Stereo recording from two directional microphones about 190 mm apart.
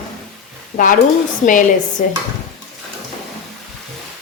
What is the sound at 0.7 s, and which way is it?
Speech, 45° left (ahead or behind).